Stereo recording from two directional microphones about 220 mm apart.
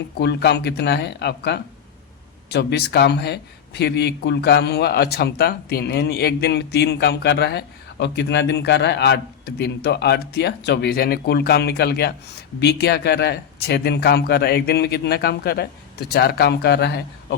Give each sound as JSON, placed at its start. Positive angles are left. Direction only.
{"t": 0.2, "sound": "speech", "side_deg": 50}